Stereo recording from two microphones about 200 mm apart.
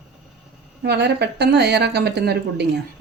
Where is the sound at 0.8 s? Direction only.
55° right (ahead or behind).